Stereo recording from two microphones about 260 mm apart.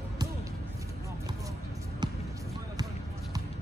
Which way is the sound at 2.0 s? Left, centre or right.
Centre.